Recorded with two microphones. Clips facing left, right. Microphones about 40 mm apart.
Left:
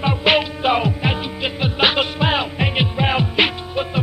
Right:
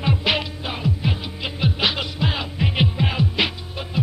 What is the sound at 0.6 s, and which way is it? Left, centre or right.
Music, left.